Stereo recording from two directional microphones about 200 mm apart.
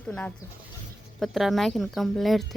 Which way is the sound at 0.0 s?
5° left (ahead or behind).